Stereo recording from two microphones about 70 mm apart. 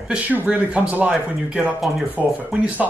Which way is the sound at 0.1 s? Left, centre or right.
Right.